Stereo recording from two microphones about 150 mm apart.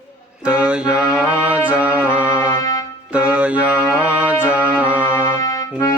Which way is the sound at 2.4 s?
20° left (ahead or behind).